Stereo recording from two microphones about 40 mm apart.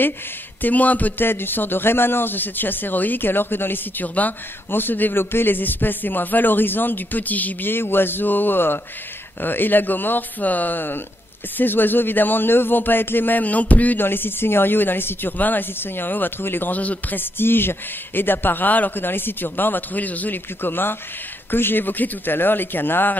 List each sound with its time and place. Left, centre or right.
0.6 s speech: left
1.1 s a man's voice: left
4.0 s speech: left
4.6 s a man's voice: left
5.2 s a man's voice: left
7.7 s a man's voice: left
13.4 s a man's voice: left
13.9 s a man's voice: left
15.3 s speech: left
15.8 s a man's voice: left
16.7 s a man's voice: left
17.2 s a man's voice: left
18.9 s a man's voice: left
20.6 s a man's voice: left